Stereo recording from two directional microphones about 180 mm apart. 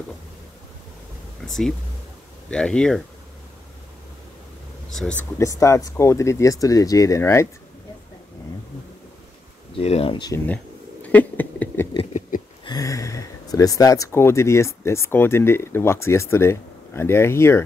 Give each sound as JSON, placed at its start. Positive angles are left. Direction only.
{"t": 1.4, "sound": "a sound", "side_deg": 0}
{"t": 2.5, "sound": "speech", "side_deg": 5}
{"t": 4.9, "sound": "speech", "side_deg": 5}
{"t": 5.4, "sound": "speech", "side_deg": 15}
{"t": 9.8, "sound": "speech", "side_deg": 35}
{"t": 10.4, "sound": "a sound", "side_deg": 10}
{"t": 12.6, "sound": "speech", "side_deg": 20}